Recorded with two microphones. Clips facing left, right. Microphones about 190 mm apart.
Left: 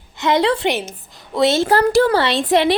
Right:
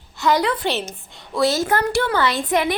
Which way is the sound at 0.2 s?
25° left (ahead or behind).